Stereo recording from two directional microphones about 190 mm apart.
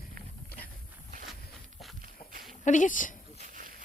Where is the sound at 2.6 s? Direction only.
40° left (ahead or behind).